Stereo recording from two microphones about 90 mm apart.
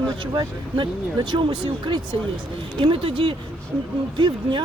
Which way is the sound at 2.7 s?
80° right.